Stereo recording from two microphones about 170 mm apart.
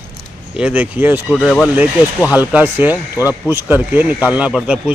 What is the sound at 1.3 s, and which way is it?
A man's voice, centre (ahead or behind).